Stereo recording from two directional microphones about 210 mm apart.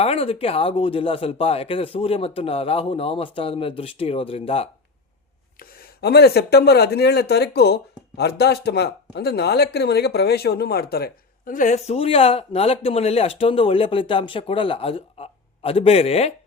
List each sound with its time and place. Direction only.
0.0 s speech: 30° left (ahead or behind)
5.5 s speech: 50° left (ahead or behind); by 16.3 s 30° left (ahead or behind)